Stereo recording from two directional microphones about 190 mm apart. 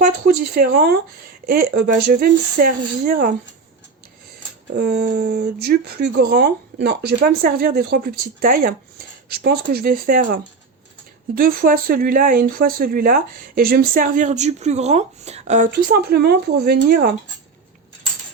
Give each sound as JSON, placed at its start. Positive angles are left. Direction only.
{"t": 0.0, "sound": "speech", "side_deg": -45}
{"t": 4.7, "sound": "speech", "side_deg": -60}